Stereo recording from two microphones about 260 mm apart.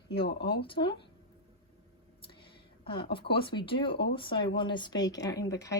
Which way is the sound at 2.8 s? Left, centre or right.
Centre.